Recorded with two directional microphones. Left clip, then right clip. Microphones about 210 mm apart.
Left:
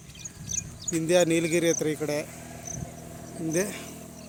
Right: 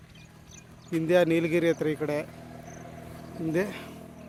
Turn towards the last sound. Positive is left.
turn(degrees=0)  # may be behind; listen again after turning